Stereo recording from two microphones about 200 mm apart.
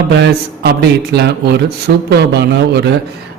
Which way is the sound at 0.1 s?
55° right (ahead or behind).